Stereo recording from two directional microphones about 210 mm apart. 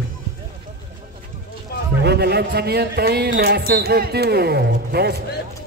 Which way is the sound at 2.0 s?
50° right (ahead or behind).